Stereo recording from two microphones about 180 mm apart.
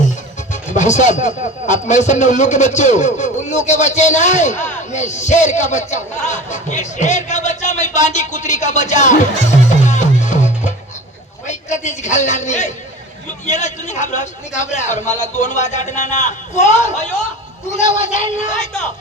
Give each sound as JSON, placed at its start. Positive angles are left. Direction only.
{"t": 0.5, "sound": "music", "side_deg": 40}
{"t": 1.6, "sound": "a man's voice", "side_deg": 40}
{"t": 9.6, "sound": "music", "side_deg": 40}
{"t": 11.4, "sound": "a man's voice", "side_deg": 40}